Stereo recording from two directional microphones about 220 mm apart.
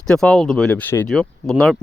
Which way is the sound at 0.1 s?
5° left (ahead or behind).